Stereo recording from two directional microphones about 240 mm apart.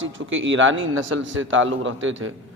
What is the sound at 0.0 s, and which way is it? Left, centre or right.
A man's voice, right.